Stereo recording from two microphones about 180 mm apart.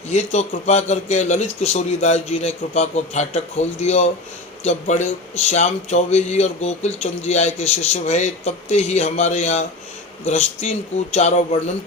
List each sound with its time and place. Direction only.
0.1 s a man's voice: 40° left (ahead or behind)